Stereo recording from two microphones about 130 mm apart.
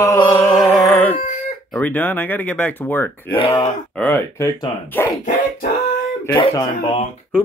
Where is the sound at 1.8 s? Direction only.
15° left (ahead or behind).